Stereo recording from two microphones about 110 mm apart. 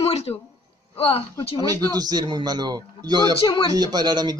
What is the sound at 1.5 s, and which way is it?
Speech, 35° right (ahead or behind).